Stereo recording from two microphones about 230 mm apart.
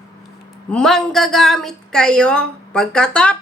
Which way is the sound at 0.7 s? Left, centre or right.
Centre.